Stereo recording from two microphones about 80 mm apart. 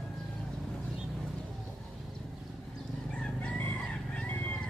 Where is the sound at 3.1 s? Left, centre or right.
Centre.